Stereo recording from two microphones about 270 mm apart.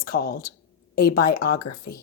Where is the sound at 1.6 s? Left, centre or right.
Left.